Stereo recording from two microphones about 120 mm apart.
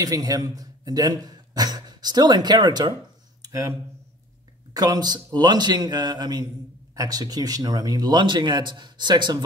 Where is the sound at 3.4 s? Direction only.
25° right (ahead or behind).